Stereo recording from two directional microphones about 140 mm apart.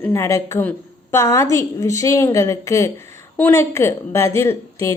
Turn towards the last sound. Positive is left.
turn(degrees=20)  # may be behind; listen again after turning